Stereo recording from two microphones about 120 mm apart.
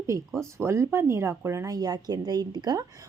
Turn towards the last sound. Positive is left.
turn(degrees=-30)  # may be behind; listen again after turning